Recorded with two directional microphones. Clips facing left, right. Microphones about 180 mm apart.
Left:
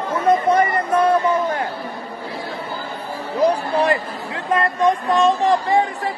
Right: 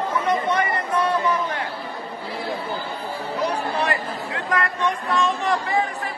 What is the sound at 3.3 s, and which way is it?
Chatter, 35° left (ahead or behind).